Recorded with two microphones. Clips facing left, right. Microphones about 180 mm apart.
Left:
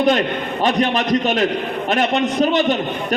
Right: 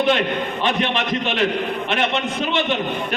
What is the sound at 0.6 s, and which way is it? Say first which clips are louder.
A man's voice: left 6 dB; 40° left (ahead or behind).